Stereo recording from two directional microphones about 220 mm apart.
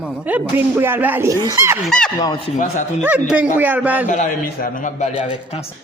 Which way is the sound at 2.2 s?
20° left (ahead or behind).